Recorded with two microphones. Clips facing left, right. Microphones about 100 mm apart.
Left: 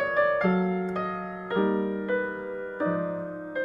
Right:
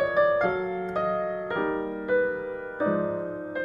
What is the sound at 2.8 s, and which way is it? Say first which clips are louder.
Music: right 3 dB; 20° right (ahead or behind).